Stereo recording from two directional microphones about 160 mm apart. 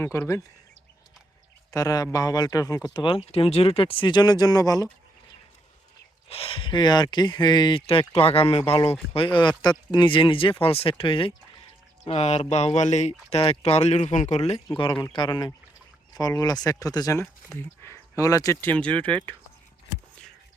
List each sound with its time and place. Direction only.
0.0 s speech: 15° left (ahead or behind)
1.7 s speech: 20° left (ahead or behind)
6.2 s speech: 40° left (ahead or behind)
15.0 s speech: 30° left (ahead or behind)